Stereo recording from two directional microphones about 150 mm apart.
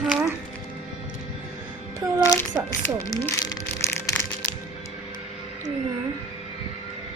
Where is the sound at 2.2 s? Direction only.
20° left (ahead or behind).